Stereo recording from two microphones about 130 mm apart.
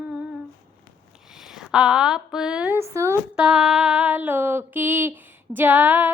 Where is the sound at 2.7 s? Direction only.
20° right (ahead or behind).